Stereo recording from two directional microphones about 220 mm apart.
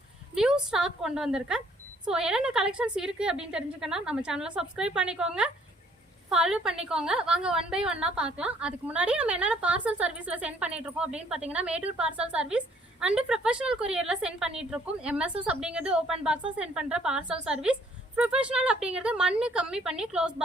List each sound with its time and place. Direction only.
0.3 s a woman's voice: 5° right (ahead or behind)